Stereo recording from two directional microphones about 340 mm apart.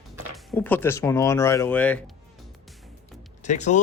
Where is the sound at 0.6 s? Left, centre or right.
Centre.